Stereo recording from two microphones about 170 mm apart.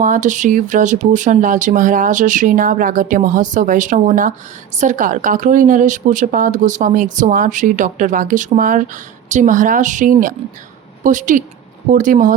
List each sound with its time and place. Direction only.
0.0 s speech: 50° right (ahead or behind)